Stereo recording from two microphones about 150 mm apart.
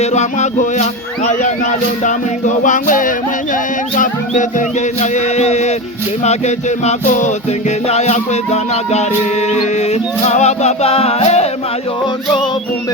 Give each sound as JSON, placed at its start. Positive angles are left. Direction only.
{"t": 0.0, "sound": "music", "side_deg": 50}
{"t": 4.9, "sound": "music", "side_deg": 50}